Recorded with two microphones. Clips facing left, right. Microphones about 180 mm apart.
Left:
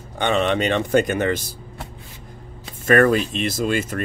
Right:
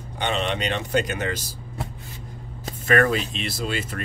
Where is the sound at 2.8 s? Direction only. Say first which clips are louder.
Left 5 dB; 45° left (ahead or behind).